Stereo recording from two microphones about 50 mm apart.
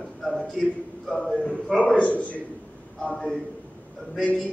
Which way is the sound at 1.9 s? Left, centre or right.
Left.